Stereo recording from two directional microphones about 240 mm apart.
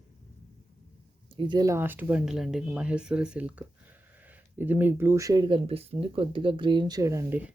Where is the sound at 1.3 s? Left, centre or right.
Centre.